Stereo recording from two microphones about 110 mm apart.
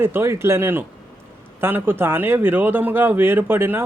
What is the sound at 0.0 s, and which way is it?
Speech, 20° right (ahead or behind).